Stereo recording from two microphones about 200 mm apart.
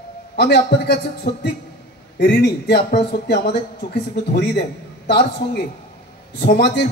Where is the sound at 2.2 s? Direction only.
55° left (ahead or behind).